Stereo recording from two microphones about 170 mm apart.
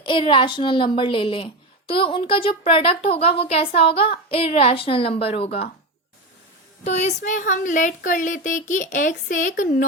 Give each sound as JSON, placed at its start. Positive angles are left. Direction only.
{"t": 0.0, "sound": "a woman's voice", "side_deg": 30}
{"t": 6.8, "sound": "speech", "side_deg": 40}